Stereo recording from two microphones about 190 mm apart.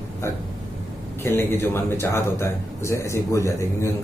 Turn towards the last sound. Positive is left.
turn(degrees=15)  # may be behind; listen again after turning